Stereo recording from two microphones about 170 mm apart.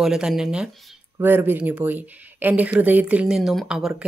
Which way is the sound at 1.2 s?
10° right (ahead or behind).